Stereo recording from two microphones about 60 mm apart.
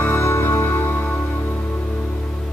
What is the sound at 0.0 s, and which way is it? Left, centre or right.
Music, left.